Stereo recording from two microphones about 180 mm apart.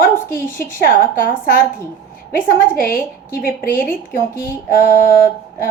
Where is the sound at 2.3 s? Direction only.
55° left (ahead or behind).